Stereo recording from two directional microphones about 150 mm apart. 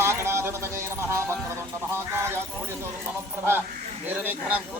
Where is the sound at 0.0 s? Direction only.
15° right (ahead or behind).